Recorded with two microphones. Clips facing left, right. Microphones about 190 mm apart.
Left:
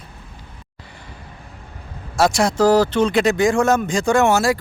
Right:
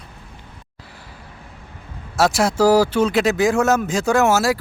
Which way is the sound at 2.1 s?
5° right (ahead or behind).